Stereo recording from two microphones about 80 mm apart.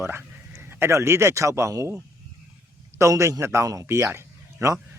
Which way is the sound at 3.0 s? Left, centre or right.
Right.